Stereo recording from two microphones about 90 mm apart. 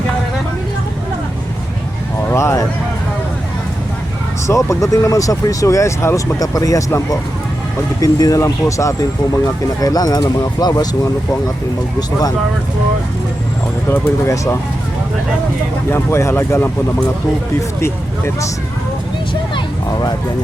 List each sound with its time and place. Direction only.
2.3 s a sound: 35° left (ahead or behind)
4.4 s speech: 35° left (ahead or behind)
6.4 s speech: 40° left (ahead or behind)
13.8 s speech: 25° left (ahead or behind)
15.9 s speech: 30° left (ahead or behind)